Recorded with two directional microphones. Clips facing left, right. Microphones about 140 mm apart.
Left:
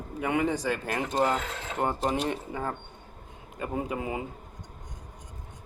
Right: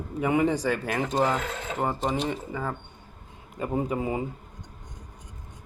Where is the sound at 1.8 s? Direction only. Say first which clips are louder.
Even; centre (ahead or behind).